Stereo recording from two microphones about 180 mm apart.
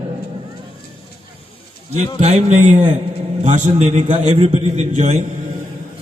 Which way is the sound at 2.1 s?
40° right (ahead or behind).